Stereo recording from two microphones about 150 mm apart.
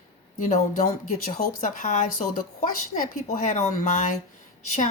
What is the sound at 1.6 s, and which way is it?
A woman's voice, 55° left (ahead or behind).